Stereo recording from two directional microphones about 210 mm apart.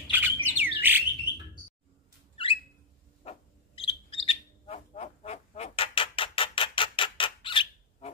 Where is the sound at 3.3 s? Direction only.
25° left (ahead or behind).